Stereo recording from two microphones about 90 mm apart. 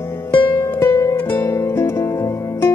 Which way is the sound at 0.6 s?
30° left (ahead or behind).